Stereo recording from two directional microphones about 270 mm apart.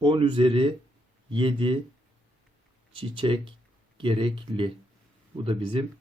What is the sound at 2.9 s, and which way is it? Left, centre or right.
Speech, centre.